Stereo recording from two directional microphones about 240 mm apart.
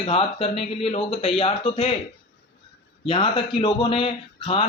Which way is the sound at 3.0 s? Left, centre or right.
Left.